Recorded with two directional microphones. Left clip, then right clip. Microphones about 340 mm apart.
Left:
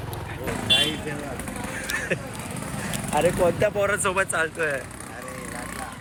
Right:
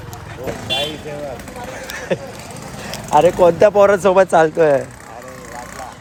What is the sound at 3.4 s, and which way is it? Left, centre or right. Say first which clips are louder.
Speech: right 11 dB; centre.